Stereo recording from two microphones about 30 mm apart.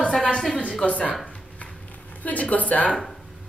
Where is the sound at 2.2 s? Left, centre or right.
Left.